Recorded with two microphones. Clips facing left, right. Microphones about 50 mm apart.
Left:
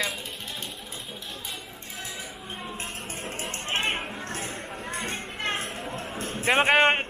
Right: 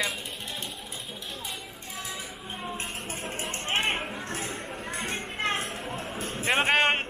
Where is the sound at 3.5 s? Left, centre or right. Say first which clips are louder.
Even; right.